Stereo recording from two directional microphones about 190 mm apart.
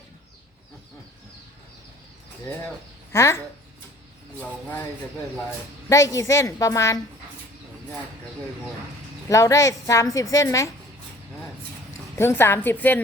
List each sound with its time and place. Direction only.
2.6 s a woman's voice: 15° left (ahead or behind)
5.9 s a woman's voice: 15° left (ahead or behind)
9.3 s a woman's voice: 15° left (ahead or behind)
12.1 s a woman's voice: 10° left (ahead or behind)